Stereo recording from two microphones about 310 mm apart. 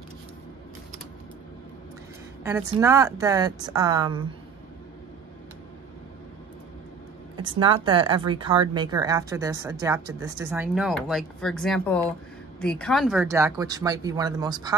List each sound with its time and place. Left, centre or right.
2.4 s speech: centre
7.4 s speech: centre